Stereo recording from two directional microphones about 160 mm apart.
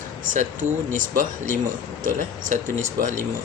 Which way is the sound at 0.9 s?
55° right (ahead or behind).